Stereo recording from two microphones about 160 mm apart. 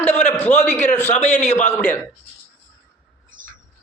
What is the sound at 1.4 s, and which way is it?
Speech, 45° left (ahead or behind).